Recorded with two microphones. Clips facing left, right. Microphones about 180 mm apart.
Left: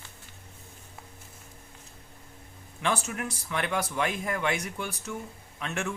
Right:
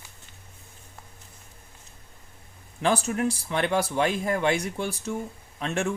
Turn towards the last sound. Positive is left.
turn(degrees=-30)  # may be behind; listen again after turning